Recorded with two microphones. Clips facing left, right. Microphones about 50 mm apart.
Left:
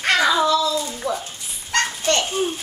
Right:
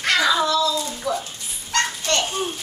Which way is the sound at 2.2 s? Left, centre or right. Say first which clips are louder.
Left 2 dB; centre.